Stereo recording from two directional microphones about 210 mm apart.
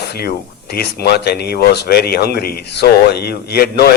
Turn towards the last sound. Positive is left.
turn(degrees=50)  # may be behind; listen again after turning